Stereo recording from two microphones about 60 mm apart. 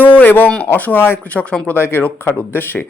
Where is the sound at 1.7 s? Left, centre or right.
Left.